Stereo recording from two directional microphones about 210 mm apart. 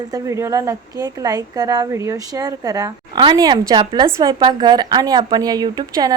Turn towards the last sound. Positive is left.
turn(degrees=-20)  # may be behind; listen again after turning